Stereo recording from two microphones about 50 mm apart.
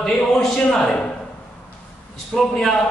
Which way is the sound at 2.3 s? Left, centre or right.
Centre.